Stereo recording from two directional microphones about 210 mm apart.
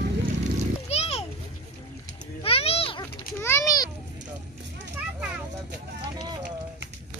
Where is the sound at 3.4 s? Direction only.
15° left (ahead or behind).